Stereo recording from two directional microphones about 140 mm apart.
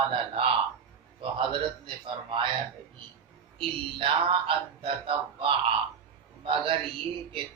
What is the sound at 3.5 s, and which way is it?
Speech, 40° right (ahead or behind).